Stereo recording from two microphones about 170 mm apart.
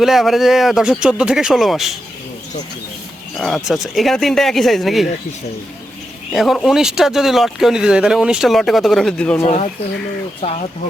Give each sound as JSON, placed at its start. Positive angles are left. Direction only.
{"t": 0.0, "sound": "speech", "side_deg": 0}
{"t": 3.3, "sound": "speech", "side_deg": 0}
{"t": 6.3, "sound": "speech", "side_deg": 0}
{"t": 9.4, "sound": "speech", "side_deg": 40}